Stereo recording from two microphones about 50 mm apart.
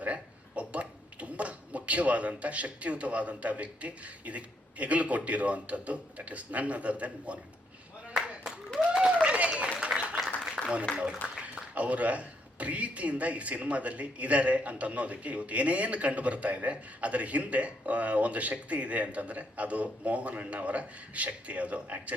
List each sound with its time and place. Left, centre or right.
0.0 s speech: right
8.8 s a sound: centre
9.2 s applause: right
9.9 s applause: centre
10.6 s a sound: centre
10.9 s speech: centre
11.3 s speech: right